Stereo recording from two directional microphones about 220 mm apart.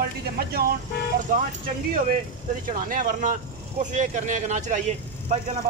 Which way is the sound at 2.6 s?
40° right (ahead or behind).